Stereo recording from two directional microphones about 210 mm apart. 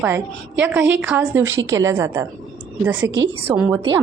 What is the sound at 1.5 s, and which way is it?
Speech, 65° right (ahead or behind).